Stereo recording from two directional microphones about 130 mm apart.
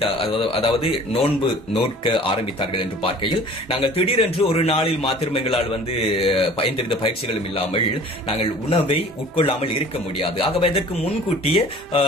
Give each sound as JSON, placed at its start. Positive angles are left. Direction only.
{"t": 0.0, "sound": "speech", "side_deg": 45}
{"t": 8.4, "sound": "speech", "side_deg": 50}